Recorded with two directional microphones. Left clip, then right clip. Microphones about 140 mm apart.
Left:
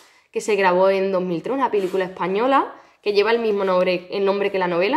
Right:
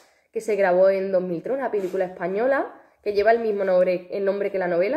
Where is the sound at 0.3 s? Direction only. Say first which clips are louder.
Left 2 dB; 15° left (ahead or behind).